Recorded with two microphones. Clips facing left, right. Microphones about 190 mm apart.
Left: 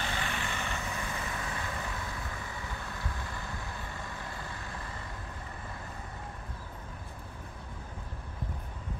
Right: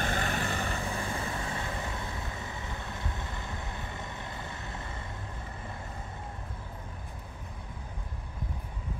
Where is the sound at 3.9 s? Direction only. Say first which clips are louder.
Right 1 dB; 20° right (ahead or behind).